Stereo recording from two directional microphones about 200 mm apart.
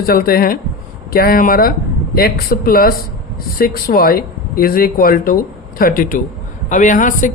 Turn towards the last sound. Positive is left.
turn(degrees=40)  # may be behind; listen again after turning